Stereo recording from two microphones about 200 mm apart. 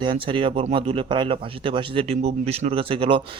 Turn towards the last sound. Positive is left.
turn(degrees=-25)  # may be behind; listen again after turning